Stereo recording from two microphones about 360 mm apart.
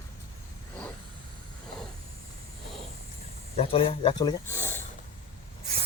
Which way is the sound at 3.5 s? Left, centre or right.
Centre.